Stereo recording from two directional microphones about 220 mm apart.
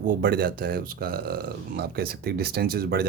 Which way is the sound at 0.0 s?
40° right (ahead or behind).